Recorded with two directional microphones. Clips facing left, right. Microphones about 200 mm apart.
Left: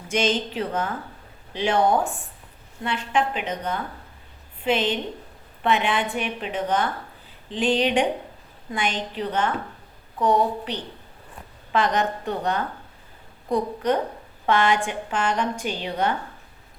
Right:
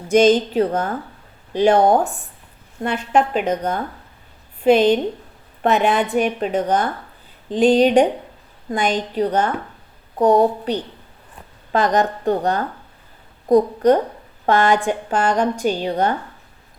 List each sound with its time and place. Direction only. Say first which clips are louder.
0.1 s a woman's voice: right 10 dB; 40° right (ahead or behind)